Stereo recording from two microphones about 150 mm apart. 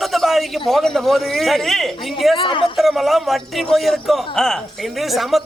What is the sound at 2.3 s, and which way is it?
Speech, 35° left (ahead or behind).